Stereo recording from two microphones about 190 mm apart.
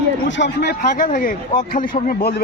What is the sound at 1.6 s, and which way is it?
Speech, 45° left (ahead or behind).